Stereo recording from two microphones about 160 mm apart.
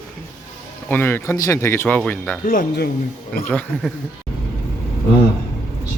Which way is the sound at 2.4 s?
60° left (ahead or behind).